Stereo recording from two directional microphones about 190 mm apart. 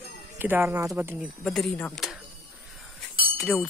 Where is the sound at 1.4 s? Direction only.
Centre (ahead or behind).